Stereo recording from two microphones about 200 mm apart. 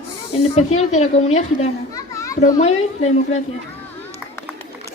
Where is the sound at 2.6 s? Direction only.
35° left (ahead or behind).